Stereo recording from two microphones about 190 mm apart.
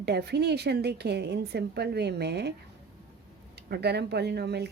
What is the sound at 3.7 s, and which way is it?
A woman's voice, 60° right (ahead or behind).